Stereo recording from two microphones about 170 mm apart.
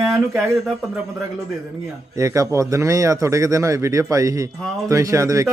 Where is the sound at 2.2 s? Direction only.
20° right (ahead or behind).